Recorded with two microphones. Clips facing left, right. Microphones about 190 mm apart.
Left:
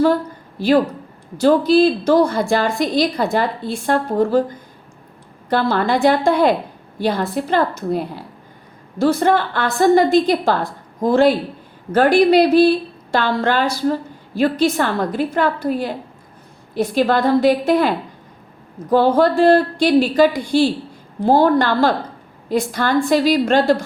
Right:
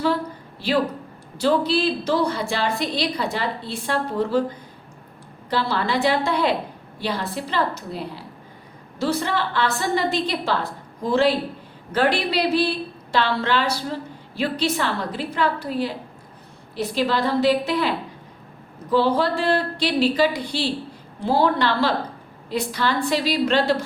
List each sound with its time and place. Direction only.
1.4 s a woman's voice: 45° left (ahead or behind)
5.5 s a woman's voice: 50° left (ahead or behind)